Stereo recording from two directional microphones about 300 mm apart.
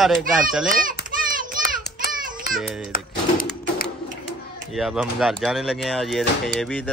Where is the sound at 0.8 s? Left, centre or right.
Right.